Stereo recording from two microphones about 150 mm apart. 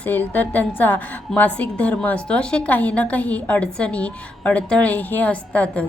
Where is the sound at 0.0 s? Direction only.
10° left (ahead or behind).